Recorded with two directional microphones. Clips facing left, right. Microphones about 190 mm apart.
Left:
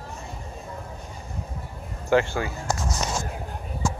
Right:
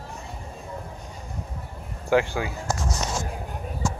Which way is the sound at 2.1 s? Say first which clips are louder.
Even; 10° right (ahead or behind).